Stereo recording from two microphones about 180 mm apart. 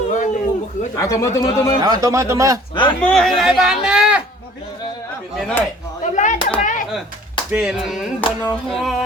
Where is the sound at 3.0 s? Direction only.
Centre (ahead or behind).